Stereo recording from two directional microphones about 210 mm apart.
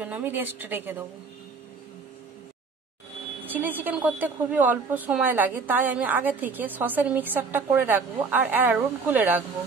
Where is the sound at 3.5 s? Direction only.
10° right (ahead or behind).